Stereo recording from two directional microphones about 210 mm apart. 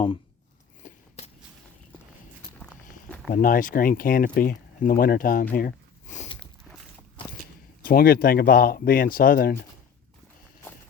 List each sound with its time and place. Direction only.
2.6 s walk: 5° left (ahead or behind)
3.3 s speech: 40° left (ahead or behind)
5.5 s a sound: 40° left (ahead or behind)
7.8 s speech: 45° left (ahead or behind)